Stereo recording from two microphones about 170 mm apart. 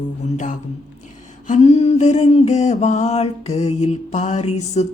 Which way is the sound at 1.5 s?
40° left (ahead or behind).